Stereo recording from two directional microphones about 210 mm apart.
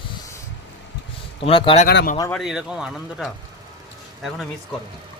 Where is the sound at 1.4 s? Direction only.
25° left (ahead or behind).